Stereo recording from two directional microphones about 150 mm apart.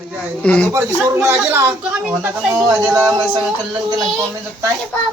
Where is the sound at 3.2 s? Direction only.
30° right (ahead or behind).